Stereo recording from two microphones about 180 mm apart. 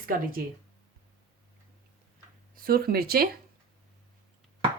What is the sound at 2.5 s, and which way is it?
Speech, 55° right (ahead or behind).